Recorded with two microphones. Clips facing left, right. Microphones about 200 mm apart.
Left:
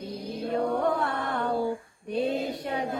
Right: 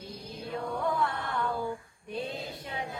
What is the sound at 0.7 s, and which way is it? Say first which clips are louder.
Chant: left 4 dB; 60° left (ahead or behind).